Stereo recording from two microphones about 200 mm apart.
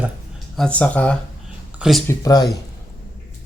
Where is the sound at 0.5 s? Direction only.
5° left (ahead or behind).